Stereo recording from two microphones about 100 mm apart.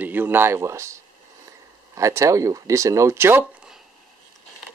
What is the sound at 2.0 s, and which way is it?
Speech, 30° right (ahead or behind).